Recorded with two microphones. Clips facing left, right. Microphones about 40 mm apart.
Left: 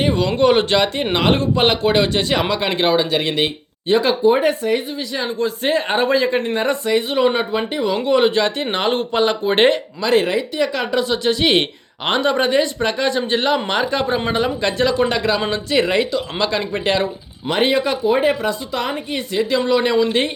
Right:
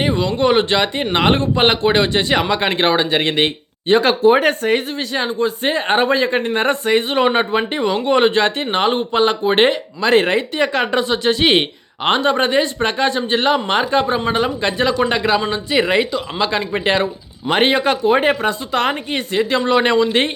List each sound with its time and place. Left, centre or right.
0.0 s a sound: centre
0.3 s speech: centre; by 4.2 s right
4.2 s speech: right
5.1 s speech: right
8.7 s speech: centre
10.0 s speech: right
11.5 s speech: right
17.5 s speech: right